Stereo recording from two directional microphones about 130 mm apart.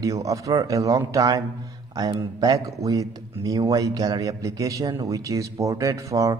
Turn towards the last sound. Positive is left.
turn(degrees=-25)  # may be behind; listen again after turning